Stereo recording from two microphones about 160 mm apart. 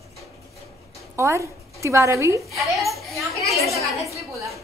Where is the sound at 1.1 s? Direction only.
15° right (ahead or behind).